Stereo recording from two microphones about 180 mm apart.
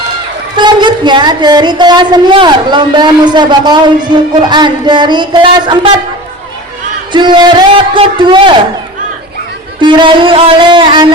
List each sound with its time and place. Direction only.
0.5 s a woman's voice: 25° right (ahead or behind)
7.1 s a woman's voice: 25° right (ahead or behind)
9.8 s a woman's voice: 25° right (ahead or behind)